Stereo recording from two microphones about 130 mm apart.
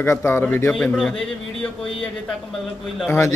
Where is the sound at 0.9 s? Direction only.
5° left (ahead or behind).